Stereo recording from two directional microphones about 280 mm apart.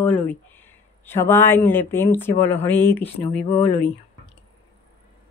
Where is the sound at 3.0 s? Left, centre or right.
Left.